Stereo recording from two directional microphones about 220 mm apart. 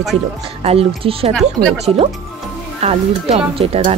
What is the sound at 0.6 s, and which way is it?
Speech, 25° right (ahead or behind).